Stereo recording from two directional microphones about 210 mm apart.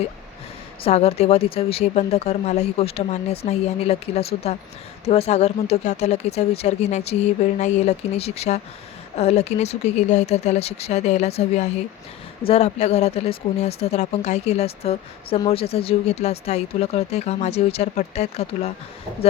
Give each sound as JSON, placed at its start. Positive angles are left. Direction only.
{"t": 0.9, "sound": "speech", "side_deg": 30}